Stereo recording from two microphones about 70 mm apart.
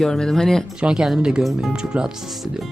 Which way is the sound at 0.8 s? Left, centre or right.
Centre.